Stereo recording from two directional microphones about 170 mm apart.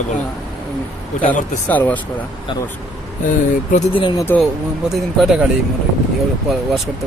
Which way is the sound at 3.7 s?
30° left (ahead or behind).